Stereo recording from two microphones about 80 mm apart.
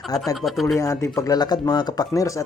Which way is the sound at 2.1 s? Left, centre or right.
Left.